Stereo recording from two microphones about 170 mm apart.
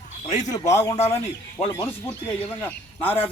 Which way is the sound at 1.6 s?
15° left (ahead or behind).